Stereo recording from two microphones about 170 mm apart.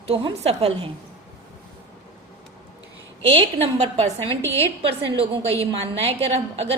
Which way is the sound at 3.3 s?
35° right (ahead or behind).